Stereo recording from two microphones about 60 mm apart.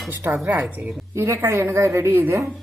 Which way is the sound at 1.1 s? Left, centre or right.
Right.